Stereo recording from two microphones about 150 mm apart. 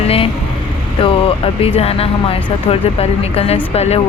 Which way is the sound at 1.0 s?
40° left (ahead or behind).